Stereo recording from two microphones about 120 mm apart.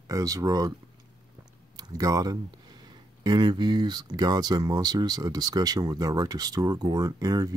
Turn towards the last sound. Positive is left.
turn(degrees=-30)  # may be behind; listen again after turning